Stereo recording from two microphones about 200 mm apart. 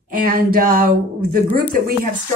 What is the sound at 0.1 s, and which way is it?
Speech, 45° right (ahead or behind).